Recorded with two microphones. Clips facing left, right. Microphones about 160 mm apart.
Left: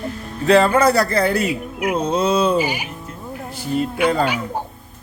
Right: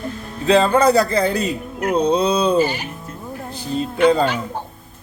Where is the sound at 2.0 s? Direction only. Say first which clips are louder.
Even; 15° right (ahead or behind).